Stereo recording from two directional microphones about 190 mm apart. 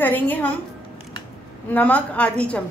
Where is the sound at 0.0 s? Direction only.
10° left (ahead or behind).